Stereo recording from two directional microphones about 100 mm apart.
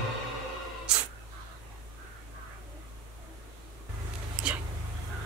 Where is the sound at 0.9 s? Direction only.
10° right (ahead or behind).